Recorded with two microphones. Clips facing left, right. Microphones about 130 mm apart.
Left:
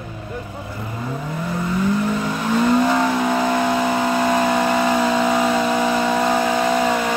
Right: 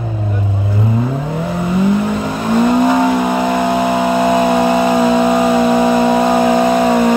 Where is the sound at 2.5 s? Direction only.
20° right (ahead or behind).